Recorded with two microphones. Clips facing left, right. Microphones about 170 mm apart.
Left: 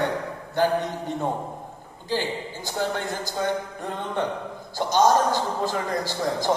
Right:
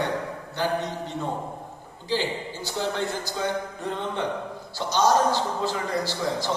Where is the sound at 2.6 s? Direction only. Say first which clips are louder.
Even; 50° left (ahead or behind).